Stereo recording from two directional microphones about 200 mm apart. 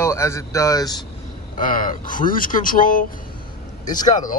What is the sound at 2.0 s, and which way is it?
Speech, 45° left (ahead or behind).